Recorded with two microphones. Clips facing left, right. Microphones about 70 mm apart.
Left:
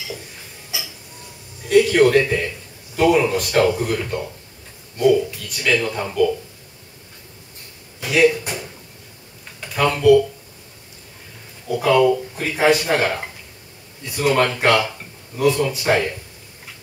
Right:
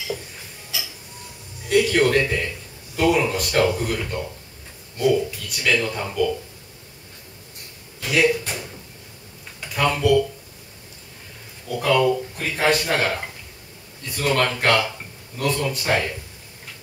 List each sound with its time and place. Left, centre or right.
0.7 s a sound: centre
1.7 s a sound: centre
3.0 s speech: centre
5.3 s speech: centre
8.0 s speech: centre
11.6 s speech: centre